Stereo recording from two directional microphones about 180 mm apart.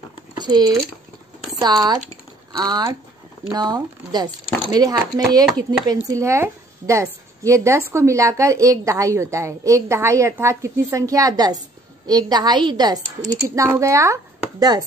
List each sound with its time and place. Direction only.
0.4 s a woman's voice: 25° right (ahead or behind)